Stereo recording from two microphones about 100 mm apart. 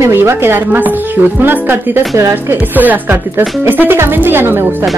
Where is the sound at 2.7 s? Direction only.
15° right (ahead or behind).